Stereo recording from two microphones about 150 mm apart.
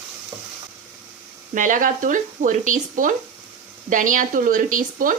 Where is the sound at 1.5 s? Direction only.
60° right (ahead or behind).